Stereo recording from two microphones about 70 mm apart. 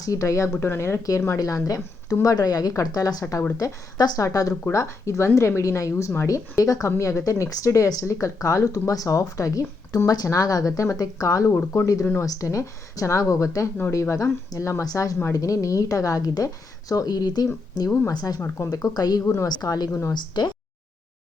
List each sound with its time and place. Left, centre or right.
0.0 s speech: left
0.6 s speech: left
1.4 s a woman's voice: left
3.6 s a woman's voice: left
4.2 s speech: left
11.5 s speech: left
12.2 s a woman's voice: left
18.6 s speech: left
19.2 s speech: left
19.5 s a woman's voice: left
19.9 s speech: left
20.1 s speech: left